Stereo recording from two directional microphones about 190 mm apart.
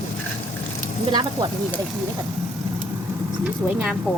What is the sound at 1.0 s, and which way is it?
Speech, 20° right (ahead or behind).